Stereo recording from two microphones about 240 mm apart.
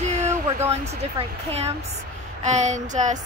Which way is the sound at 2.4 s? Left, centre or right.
Right.